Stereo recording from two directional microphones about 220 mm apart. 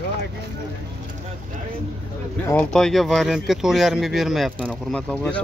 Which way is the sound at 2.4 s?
5° left (ahead or behind).